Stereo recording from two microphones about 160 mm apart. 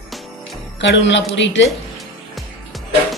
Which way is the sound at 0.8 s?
90° left.